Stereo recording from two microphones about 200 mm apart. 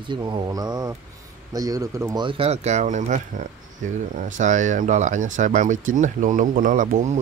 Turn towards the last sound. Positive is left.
turn(degrees=-40)  # may be behind; listen again after turning